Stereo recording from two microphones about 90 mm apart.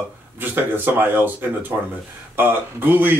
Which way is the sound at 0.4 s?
20° right (ahead or behind).